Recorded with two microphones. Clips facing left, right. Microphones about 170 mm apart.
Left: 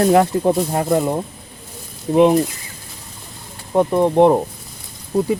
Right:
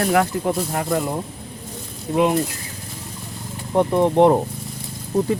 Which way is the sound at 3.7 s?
10° left (ahead or behind).